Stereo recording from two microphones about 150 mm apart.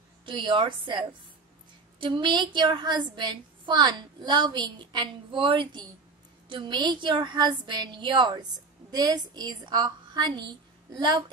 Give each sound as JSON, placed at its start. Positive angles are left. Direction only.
{"t": 0.2, "sound": "a woman's voice", "side_deg": -35}